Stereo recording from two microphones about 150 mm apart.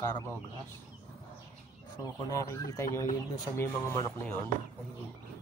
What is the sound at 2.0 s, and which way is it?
Speech, 25° left (ahead or behind).